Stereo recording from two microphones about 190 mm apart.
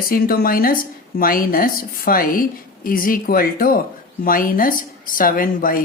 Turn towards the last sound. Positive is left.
turn(degrees=50)  # may be behind; listen again after turning